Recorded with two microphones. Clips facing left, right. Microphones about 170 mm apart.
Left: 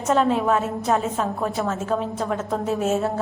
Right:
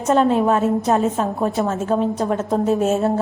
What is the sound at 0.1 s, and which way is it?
A woman's voice, 35° right (ahead or behind).